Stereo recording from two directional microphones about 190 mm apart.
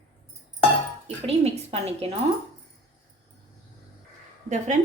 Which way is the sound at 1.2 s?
30° right (ahead or behind).